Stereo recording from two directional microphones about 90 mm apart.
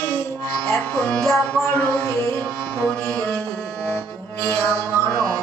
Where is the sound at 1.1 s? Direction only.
5° left (ahead or behind).